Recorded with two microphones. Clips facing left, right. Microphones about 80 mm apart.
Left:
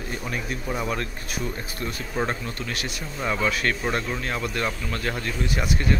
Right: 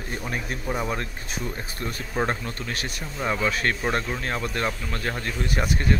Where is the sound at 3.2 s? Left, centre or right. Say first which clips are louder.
Even; centre.